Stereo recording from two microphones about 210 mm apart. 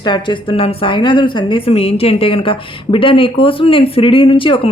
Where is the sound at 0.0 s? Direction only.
20° left (ahead or behind).